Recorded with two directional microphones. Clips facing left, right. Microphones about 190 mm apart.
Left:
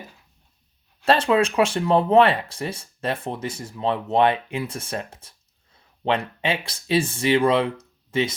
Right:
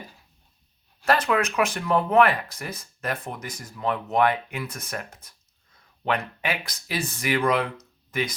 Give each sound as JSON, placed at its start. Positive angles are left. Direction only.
{"t": 1.0, "sound": "speech", "side_deg": 30}